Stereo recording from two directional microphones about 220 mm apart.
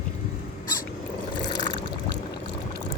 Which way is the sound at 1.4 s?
20° left (ahead or behind).